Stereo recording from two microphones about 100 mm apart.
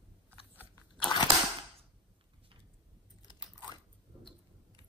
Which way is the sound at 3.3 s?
45° left (ahead or behind).